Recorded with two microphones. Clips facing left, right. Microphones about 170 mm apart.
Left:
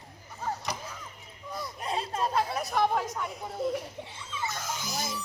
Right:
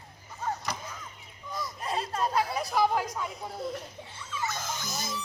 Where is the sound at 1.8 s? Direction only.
25° left (ahead or behind).